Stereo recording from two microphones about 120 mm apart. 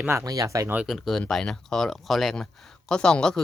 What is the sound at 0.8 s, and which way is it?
Speech, centre (ahead or behind).